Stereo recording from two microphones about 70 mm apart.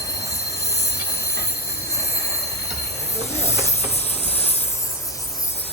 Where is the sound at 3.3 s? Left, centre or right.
Left.